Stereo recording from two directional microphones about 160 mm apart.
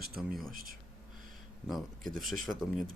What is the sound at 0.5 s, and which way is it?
Speech, 65° right (ahead or behind).